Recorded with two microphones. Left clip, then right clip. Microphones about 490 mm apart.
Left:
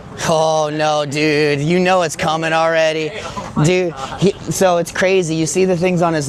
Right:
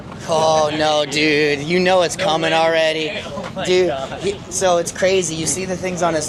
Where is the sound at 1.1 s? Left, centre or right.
Left.